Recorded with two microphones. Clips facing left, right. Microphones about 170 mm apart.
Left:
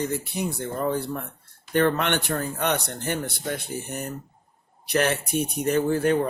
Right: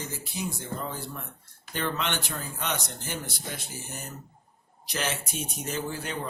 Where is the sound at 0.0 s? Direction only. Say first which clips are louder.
Left 8 dB; 60° left (ahead or behind).